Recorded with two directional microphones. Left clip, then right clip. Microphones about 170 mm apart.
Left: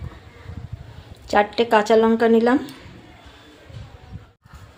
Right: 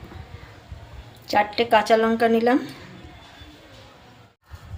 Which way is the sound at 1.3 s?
30° left (ahead or behind).